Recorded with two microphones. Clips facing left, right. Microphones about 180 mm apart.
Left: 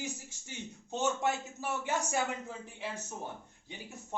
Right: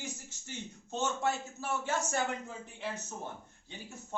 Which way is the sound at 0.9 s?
15° left (ahead or behind).